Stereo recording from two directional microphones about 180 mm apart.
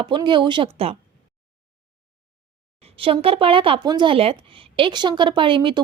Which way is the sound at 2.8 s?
30° right (ahead or behind).